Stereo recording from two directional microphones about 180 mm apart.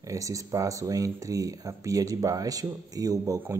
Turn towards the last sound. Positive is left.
turn(degrees=-20)  # may be behind; listen again after turning